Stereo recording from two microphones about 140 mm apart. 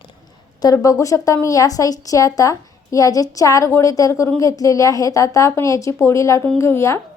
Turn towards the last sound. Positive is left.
turn(degrees=20)  # may be behind; listen again after turning